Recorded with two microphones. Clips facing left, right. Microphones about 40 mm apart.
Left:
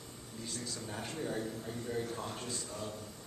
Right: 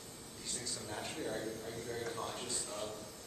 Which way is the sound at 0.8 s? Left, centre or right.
Centre.